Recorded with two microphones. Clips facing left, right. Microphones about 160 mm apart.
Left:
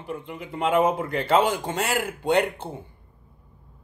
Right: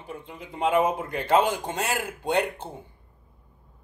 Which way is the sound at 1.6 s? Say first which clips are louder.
Left 3 dB; 85° left.